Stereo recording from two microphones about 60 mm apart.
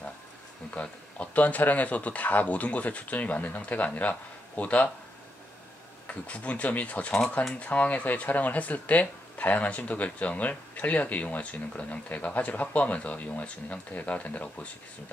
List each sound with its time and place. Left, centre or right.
0.7 s speech: left
6.0 s speech: left